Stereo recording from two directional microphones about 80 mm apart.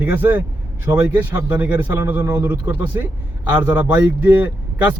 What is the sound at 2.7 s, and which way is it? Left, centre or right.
Speech, right.